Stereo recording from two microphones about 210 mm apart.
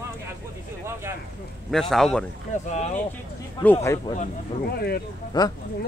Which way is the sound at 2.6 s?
30° left (ahead or behind).